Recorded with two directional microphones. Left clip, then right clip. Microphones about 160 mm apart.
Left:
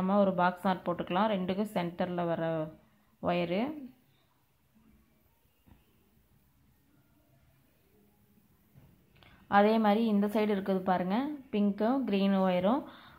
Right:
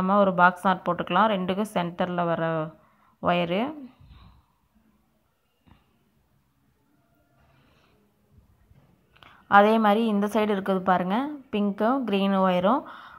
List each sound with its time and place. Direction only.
0.0 s a woman's voice: 15° right (ahead or behind)
9.2 s a woman's voice: 15° right (ahead or behind)